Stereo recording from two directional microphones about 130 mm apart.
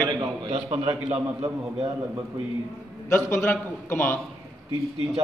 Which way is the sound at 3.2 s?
20° left (ahead or behind).